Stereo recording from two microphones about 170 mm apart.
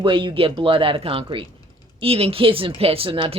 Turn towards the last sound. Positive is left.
turn(degrees=-30)  # may be behind; listen again after turning